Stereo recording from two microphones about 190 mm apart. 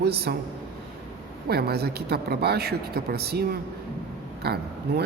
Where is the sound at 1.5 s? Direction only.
55° right (ahead or behind).